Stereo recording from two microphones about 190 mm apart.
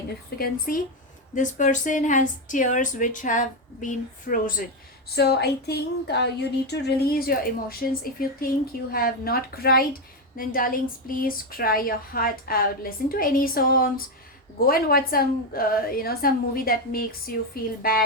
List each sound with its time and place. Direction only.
0.3 s a woman's voice: 50° left (ahead or behind)
5.0 s a woman's voice: 60° left (ahead or behind)